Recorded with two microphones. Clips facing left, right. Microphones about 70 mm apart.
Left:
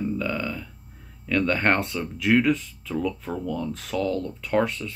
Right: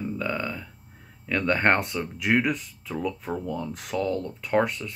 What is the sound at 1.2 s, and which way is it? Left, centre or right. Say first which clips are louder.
Speech: even; centre.